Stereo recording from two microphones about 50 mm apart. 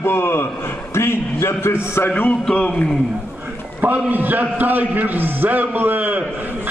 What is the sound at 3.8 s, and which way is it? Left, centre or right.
A man's voice, right.